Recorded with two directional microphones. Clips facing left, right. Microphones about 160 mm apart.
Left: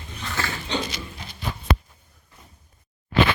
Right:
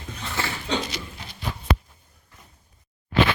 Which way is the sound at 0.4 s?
25° right (ahead or behind).